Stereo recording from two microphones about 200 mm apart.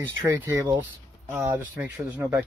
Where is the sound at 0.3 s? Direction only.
15° right (ahead or behind).